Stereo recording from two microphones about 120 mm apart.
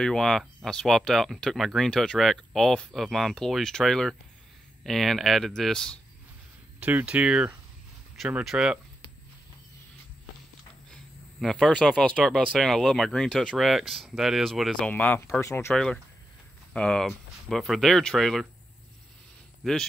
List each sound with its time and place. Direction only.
0.0 s speech: 5° left (ahead or behind)
6.8 s speech: 15° right (ahead or behind)
11.4 s speech: 5° left (ahead or behind); by 15.7 s 20° left (ahead or behind)
15.7 s speech: 5° left (ahead or behind)
19.6 s speech: 5° left (ahead or behind)